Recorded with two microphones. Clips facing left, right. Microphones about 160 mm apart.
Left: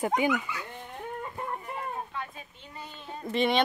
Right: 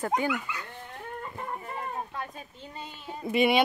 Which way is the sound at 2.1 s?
45° right (ahead or behind).